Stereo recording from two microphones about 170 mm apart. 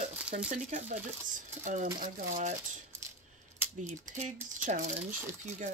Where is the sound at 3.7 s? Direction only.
45° right (ahead or behind).